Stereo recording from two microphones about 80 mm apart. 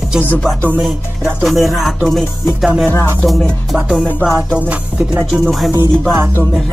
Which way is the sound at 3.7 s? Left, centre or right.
Centre.